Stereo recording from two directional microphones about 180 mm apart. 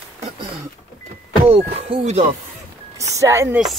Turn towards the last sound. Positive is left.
turn(degrees=-15)  # may be behind; listen again after turning